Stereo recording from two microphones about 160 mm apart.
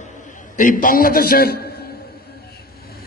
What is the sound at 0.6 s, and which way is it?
A man's voice, 55° left (ahead or behind).